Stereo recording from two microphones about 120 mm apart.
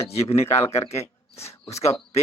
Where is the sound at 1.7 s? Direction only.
25° left (ahead or behind).